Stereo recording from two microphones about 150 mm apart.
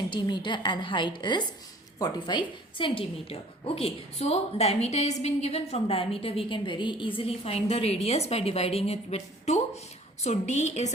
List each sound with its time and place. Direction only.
0.1 s a woman's voice: 30° left (ahead or behind); by 10.8 s 50° left (ahead or behind)